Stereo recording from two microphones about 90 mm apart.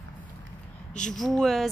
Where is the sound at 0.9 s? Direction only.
5° left (ahead or behind).